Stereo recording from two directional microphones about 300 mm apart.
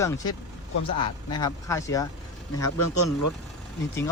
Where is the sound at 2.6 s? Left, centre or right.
Left.